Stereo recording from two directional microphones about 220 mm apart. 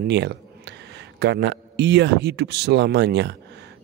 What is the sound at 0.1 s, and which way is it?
A man's voice, 50° right (ahead or behind).